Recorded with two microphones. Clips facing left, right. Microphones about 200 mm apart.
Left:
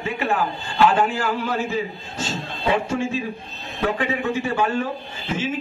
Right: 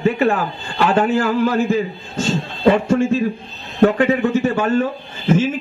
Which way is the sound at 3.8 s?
45° right (ahead or behind).